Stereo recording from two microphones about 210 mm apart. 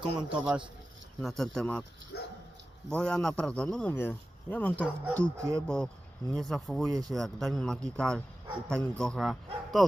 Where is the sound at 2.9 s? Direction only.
5° left (ahead or behind).